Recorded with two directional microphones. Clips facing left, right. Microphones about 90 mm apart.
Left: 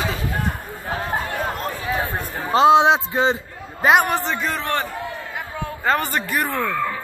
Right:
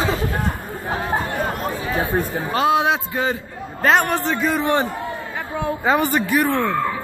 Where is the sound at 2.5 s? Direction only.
25° left (ahead or behind).